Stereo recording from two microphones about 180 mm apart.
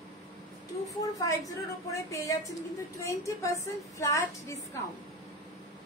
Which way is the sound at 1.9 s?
20° left (ahead or behind).